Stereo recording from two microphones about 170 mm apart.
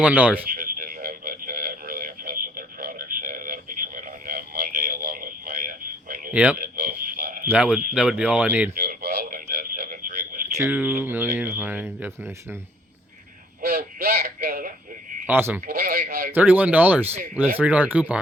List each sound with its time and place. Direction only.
0.0 s speech: 10° right (ahead or behind)
0.5 s a sound: 60° right (ahead or behind)
6.3 s speech: 10° right (ahead or behind)
6.6 s a sound: 65° right (ahead or behind)
7.4 s speech: 5° right (ahead or behind)
8.7 s radio: 60° right (ahead or behind)
10.6 s speech: 10° right (ahead or behind)
13.6 s radio: 65° right (ahead or behind)
15.3 s speech: 10° right (ahead or behind)
15.6 s a sound: 60° right (ahead or behind)
16.3 s speech: 10° right (ahead or behind)